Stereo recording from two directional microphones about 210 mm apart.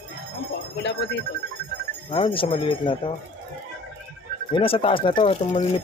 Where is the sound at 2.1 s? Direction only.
25° left (ahead or behind).